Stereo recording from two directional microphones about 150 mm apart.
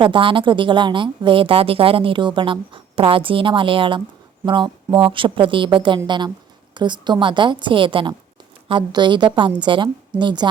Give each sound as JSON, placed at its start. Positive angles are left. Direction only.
{"t": 0.0, "sound": "a woman's voice", "side_deg": -35}